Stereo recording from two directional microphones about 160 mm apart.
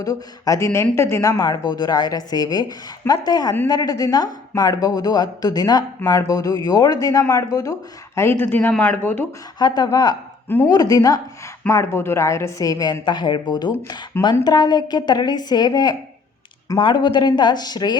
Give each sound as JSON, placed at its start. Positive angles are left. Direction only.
{"t": 0.0, "sound": "speech", "side_deg": 20}
{"t": 9.6, "sound": "speech", "side_deg": 25}